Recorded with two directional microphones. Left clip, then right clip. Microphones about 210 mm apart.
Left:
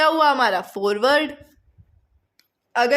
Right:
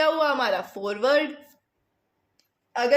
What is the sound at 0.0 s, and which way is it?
A woman's voice, 45° left (ahead or behind).